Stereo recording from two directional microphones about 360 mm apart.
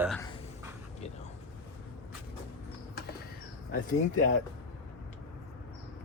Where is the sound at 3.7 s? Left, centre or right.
Left.